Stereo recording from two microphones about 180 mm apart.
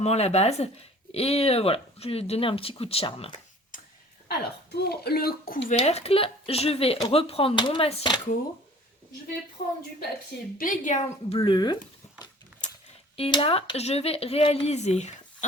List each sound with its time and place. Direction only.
0.0 s speech: 35° left (ahead or behind)
4.3 s speech: 60° left (ahead or behind)
5.7 s speech: 35° left (ahead or behind)
10.6 s a woman's voice: 45° left (ahead or behind)
11.3 s speech: 25° left (ahead or behind)
13.1 s speech: 30° left (ahead or behind)